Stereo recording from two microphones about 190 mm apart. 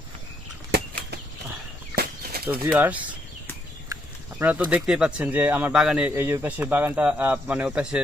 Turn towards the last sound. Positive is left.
turn(degrees=-5)  # may be behind; listen again after turning